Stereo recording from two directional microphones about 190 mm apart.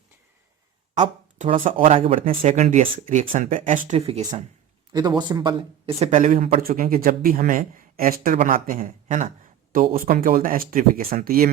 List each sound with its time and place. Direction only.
0.9 s speech: 35° right (ahead or behind)